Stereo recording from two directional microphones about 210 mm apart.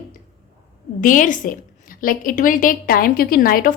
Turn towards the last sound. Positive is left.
turn(degrees=45)  # may be behind; listen again after turning